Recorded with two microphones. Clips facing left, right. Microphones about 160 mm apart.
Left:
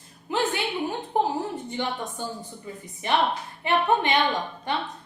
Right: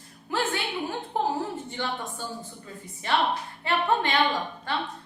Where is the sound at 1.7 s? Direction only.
15° left (ahead or behind).